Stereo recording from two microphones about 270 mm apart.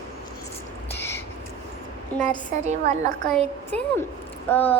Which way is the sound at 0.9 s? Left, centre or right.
Centre.